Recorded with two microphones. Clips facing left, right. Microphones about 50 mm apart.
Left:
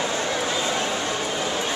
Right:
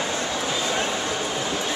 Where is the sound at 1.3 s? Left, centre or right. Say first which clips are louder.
Left 1 dB; centre.